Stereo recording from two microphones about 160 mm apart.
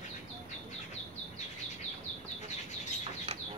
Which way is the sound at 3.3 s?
40° right (ahead or behind).